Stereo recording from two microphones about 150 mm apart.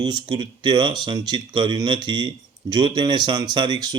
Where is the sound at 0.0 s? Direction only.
30° right (ahead or behind).